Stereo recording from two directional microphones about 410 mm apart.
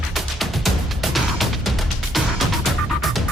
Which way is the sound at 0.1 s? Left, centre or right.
Centre.